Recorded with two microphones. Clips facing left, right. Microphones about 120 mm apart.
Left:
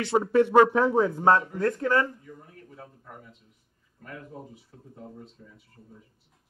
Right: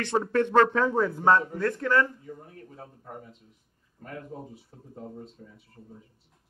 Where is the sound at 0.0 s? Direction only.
10° left (ahead or behind).